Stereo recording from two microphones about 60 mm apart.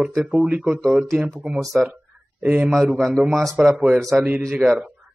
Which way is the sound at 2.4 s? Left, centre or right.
Centre.